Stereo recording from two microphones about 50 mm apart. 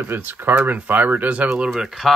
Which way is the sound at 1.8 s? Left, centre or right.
Centre.